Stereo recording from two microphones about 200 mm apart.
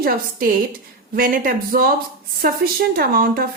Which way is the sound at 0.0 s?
45° right (ahead or behind).